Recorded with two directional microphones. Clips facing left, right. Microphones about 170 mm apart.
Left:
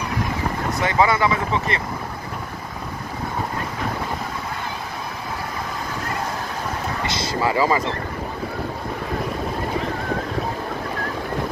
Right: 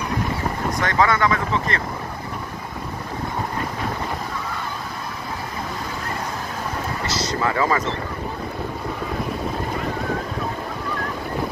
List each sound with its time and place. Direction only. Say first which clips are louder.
0.7 s speech: left 1 dB; 5° left (ahead or behind)
7.4 s speech: left 2 dB; 25° left (ahead or behind)